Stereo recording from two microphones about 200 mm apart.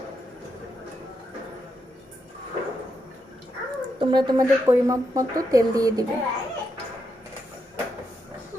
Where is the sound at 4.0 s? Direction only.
20° right (ahead or behind).